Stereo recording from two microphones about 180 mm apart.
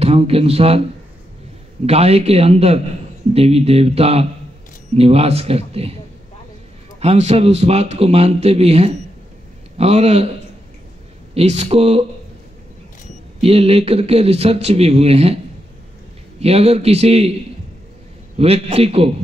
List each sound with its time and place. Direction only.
0.0 s speech: 35° right (ahead or behind)
1.9 s speech: 35° right (ahead or behind)
7.0 s speech: 35° right (ahead or behind)
11.3 s speech: 35° right (ahead or behind)
13.4 s speech: 35° right (ahead or behind)
16.3 s speech: 35° right (ahead or behind)
18.4 s speech: 35° right (ahead or behind)